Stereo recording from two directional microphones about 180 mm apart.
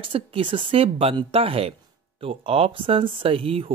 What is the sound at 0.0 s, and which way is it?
Speech, 30° right (ahead or behind).